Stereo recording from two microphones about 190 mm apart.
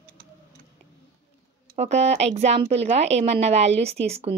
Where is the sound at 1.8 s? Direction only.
35° right (ahead or behind).